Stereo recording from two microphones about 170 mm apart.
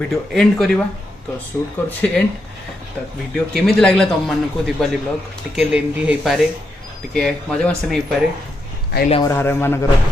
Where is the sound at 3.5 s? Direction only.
Centre (ahead or behind).